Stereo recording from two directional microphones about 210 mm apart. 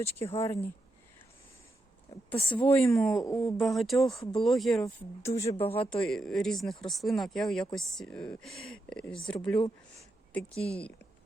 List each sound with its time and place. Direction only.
0.3 s speech: 15° left (ahead or behind)
2.3 s speech: 25° left (ahead or behind)
2.8 s speech: centre (ahead or behind)
5.2 s speech: 15° left (ahead or behind)
5.5 s speech: 25° left (ahead or behind)
5.9 s speech: 5° left (ahead or behind)